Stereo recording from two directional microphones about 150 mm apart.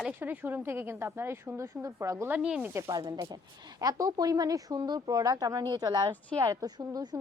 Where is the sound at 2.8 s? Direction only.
25° right (ahead or behind).